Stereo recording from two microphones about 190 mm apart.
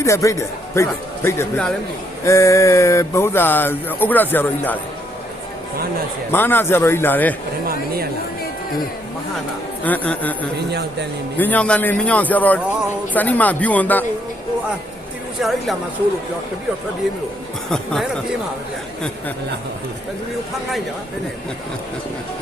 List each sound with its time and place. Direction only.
0.0 s music: 15° left (ahead or behind)
6.3 s music: 10° left (ahead or behind)
9.8 s music: 10° left (ahead or behind)
11.3 s music: 10° left (ahead or behind)
15.4 s speech: centre (ahead or behind)
17.7 s speech: centre (ahead or behind)